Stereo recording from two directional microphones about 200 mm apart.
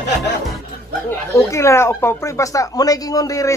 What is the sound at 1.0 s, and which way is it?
Speech, 15° left (ahead or behind).